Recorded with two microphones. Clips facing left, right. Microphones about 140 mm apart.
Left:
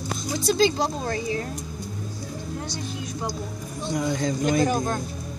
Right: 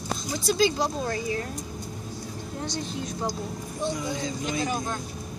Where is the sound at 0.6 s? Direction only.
25° left (ahead or behind).